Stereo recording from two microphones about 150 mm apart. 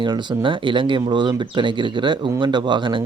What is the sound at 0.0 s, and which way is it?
A man's voice, 30° right (ahead or behind).